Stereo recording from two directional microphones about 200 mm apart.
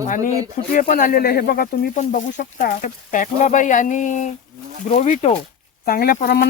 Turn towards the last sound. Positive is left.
turn(degrees=50)  # may be behind; listen again after turning